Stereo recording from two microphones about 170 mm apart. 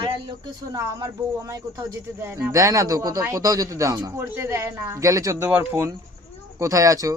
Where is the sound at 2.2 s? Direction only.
20° right (ahead or behind).